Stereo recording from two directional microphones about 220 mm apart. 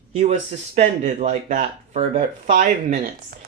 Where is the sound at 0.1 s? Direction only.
30° right (ahead or behind).